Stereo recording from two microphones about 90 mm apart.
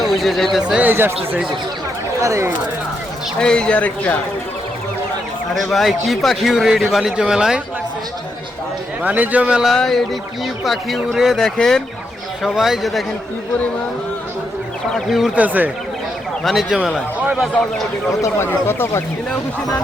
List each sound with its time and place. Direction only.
0.0 s speech: centre (ahead or behind)
0.7 s speech: 20° right (ahead or behind)
2.2 s speech: 35° right (ahead or behind)
3.4 s a man's voice: 10° left (ahead or behind)
5.7 s speech: centre (ahead or behind)
9.0 s speech: 15° right (ahead or behind)
9.7 s speech: 5° left (ahead or behind)
14.9 s speech: 5° right (ahead or behind)
15.4 s speech: 20° right (ahead or behind)
16.4 s speech: centre (ahead or behind)
18.2 s speech: 25° left (ahead or behind)